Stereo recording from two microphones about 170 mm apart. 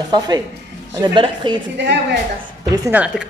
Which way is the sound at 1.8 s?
90° right.